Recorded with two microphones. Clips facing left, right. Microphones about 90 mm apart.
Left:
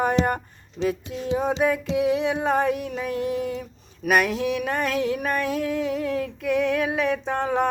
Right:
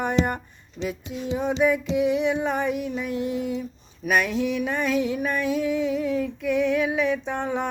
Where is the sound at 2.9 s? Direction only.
60° left (ahead or behind).